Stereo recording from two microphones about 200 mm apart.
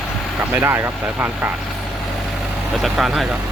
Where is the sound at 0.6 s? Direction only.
10° right (ahead or behind).